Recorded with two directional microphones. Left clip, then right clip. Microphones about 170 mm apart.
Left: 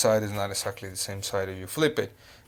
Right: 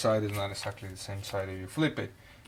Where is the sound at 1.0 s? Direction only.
30° left (ahead or behind).